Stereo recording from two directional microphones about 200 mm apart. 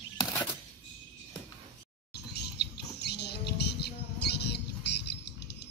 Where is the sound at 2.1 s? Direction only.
55° left (ahead or behind).